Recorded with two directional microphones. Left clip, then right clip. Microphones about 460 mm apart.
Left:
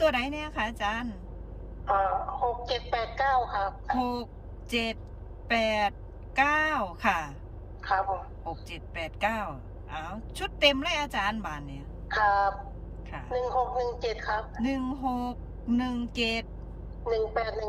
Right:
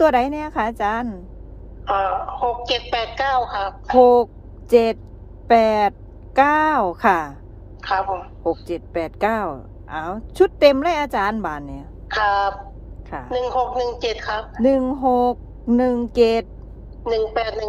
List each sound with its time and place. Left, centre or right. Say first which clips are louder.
0.0 s a woman's voice: right 10 dB; centre